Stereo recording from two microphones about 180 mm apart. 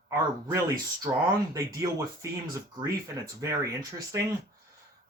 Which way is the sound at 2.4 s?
25° right (ahead or behind).